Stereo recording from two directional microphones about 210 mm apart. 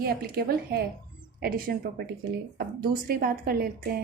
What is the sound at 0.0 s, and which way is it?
A woman's voice, 45° right (ahead or behind).